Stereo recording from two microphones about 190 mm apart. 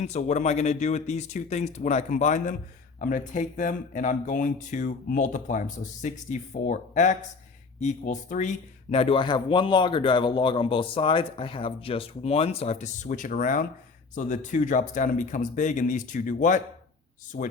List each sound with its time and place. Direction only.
0.0 s speech: 35° left (ahead or behind)
17.3 s speech: 55° left (ahead or behind)